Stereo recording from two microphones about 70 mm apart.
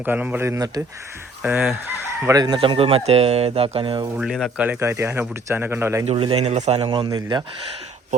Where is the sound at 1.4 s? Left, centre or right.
Right.